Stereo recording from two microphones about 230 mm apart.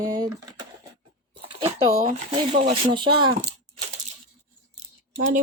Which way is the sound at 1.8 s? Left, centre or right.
Right.